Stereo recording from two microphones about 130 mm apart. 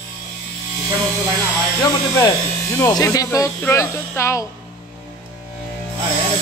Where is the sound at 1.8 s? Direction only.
25° left (ahead or behind).